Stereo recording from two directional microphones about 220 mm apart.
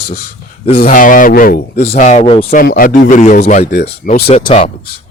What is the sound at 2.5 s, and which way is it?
Speech, 40° left (ahead or behind).